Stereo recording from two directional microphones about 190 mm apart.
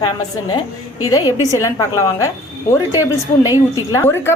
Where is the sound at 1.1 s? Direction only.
20° left (ahead or behind).